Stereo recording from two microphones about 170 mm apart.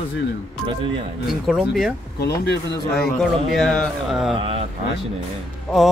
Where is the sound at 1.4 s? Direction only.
Centre (ahead or behind).